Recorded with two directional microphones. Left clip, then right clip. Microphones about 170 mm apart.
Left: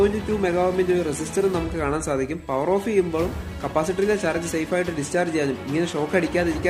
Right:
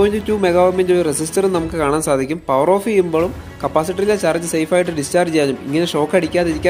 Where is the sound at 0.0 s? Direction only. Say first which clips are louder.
Right 6 dB; 40° right (ahead or behind).